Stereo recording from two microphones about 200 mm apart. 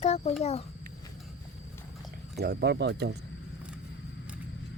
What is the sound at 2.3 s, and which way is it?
Speech, 50° right (ahead or behind).